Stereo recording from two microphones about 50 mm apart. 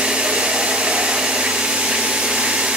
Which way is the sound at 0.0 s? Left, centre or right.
Centre.